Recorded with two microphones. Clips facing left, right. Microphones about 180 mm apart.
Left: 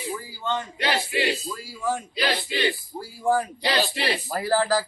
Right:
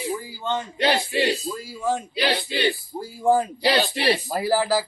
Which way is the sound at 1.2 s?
20° right (ahead or behind).